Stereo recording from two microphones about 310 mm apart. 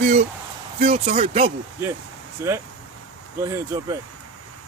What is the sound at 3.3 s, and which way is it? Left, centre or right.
Speech, centre.